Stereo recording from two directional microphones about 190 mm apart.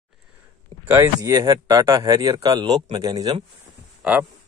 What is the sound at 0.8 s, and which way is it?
Speech, 10° right (ahead or behind).